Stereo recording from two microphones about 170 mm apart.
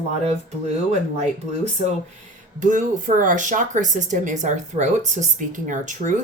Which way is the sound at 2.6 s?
50° right (ahead or behind).